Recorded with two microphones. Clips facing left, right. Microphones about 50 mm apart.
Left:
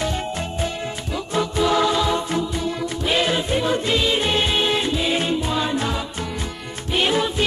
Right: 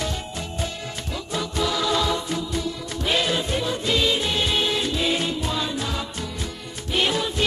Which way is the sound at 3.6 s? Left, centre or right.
Left.